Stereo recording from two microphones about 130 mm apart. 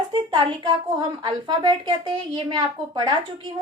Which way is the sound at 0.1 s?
40° right (ahead or behind).